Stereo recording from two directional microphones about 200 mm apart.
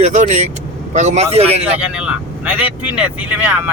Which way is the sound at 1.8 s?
5° right (ahead or behind).